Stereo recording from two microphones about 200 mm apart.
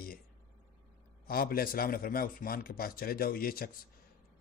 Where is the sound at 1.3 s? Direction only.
45° left (ahead or behind).